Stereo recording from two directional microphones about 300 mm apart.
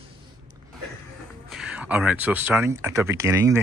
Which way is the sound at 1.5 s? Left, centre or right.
Centre.